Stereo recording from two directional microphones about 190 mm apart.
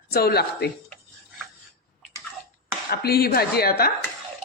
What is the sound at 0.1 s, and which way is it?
Speech, 55° left (ahead or behind).